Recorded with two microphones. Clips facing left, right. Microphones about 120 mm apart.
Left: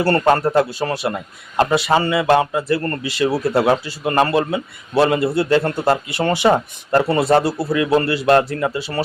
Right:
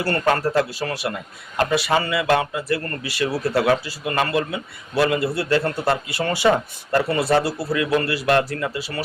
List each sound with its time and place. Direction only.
0.0 s a man's voice: 30° left (ahead or behind)